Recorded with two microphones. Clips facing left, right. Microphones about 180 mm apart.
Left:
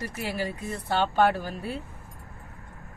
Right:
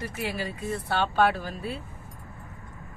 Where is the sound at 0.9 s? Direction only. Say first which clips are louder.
Left 1 dB; 15° left (ahead or behind).